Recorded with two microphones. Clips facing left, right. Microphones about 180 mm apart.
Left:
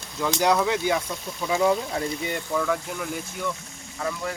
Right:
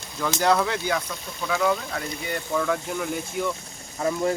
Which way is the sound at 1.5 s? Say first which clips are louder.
Left 2 dB; 25° left (ahead or behind).